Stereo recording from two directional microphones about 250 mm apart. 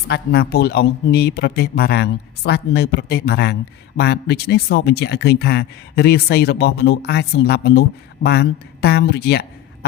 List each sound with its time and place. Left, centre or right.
0.1 s speech: left